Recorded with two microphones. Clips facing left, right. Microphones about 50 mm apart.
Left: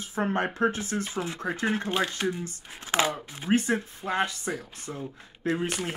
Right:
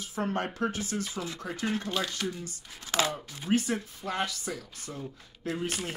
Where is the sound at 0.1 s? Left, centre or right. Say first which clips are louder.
Left 4 dB; left.